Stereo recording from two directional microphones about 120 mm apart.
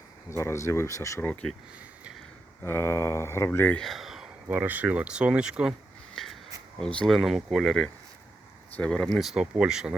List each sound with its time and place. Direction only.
0.3 s mantra: 25° left (ahead or behind)
1.3 s speech: 10° left (ahead or behind)
2.6 s mantra: 20° left (ahead or behind)
3.8 s a sound: centre (ahead or behind)
4.4 s speech: 15° right (ahead or behind)
6.2 s a sound: 5° left (ahead or behind)
6.7 s speech: 5° left (ahead or behind)